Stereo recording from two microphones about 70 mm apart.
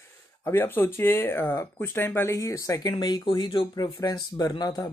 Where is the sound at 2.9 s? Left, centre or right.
Left.